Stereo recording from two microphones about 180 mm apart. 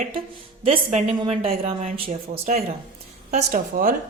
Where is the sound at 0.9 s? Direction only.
40° right (ahead or behind).